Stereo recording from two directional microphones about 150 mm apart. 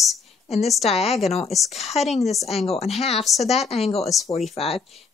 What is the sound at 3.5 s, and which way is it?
Speech, 45° left (ahead or behind).